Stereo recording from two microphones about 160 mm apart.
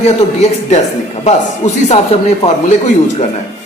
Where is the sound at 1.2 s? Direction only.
45° left (ahead or behind).